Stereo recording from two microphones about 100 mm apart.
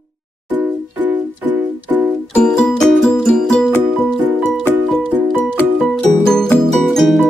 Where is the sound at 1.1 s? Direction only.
15° right (ahead or behind).